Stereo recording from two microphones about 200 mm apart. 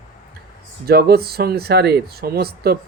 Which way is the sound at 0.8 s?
50° right (ahead or behind).